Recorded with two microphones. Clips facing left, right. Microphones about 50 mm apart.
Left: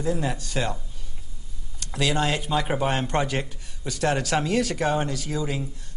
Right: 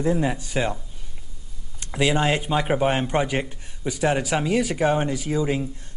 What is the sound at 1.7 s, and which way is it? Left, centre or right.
A man's voice, right.